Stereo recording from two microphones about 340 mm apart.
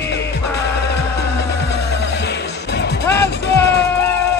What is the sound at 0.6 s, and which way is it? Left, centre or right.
Music, left.